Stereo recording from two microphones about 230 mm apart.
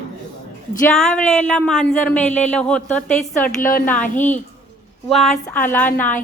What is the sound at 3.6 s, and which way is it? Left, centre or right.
Speech, left.